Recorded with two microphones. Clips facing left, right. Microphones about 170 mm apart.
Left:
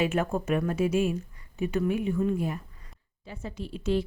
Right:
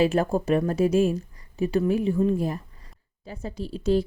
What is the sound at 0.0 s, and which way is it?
A woman's voice, 35° right (ahead or behind).